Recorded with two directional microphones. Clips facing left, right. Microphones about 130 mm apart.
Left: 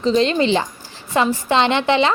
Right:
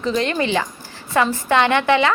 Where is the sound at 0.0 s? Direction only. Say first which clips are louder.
Left 4 dB; 25° left (ahead or behind).